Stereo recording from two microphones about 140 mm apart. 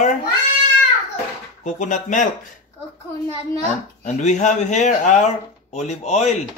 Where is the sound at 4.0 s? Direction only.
60° left (ahead or behind).